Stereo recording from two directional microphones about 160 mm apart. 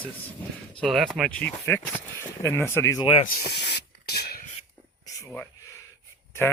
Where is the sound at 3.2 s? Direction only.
80° left.